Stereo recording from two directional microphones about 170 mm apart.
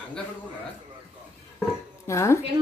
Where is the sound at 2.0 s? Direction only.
15° left (ahead or behind).